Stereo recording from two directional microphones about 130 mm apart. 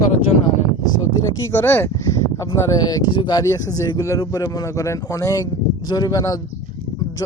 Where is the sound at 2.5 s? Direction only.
30° left (ahead or behind).